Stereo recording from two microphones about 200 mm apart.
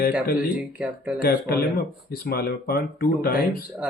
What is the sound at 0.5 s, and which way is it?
Speech, 5° right (ahead or behind).